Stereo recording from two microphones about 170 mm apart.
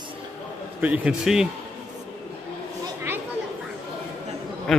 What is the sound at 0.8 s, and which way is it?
Speech, 5° right (ahead or behind).